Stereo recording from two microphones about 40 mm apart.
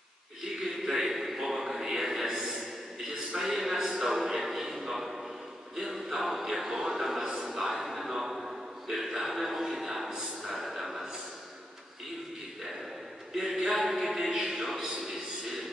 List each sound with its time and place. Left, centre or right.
0.8 s a sound: centre
3.3 s a man's voice: centre
13.4 s a man's voice: centre